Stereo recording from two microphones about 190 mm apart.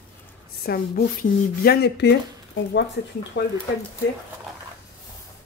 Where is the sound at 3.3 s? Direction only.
55° left (ahead or behind).